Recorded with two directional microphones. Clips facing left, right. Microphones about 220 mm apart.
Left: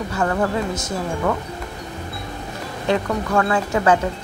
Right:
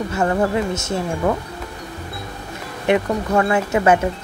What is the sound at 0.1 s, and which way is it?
Speech, 25° right (ahead or behind).